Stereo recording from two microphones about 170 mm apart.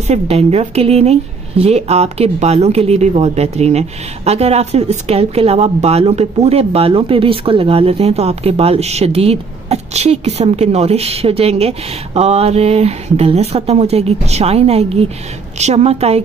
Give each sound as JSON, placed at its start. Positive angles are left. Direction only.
{"t": 0.0, "sound": "speech", "side_deg": -40}